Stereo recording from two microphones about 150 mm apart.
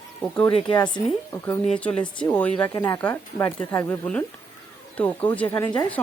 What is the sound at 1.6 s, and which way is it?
Speech, 5° left (ahead or behind).